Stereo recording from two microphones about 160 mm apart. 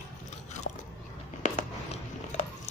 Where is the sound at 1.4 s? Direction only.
45° left (ahead or behind).